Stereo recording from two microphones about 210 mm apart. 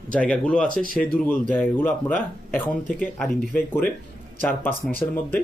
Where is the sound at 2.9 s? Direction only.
40° left (ahead or behind).